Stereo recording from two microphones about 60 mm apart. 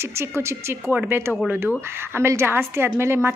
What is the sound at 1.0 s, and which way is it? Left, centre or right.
A woman's voice, right.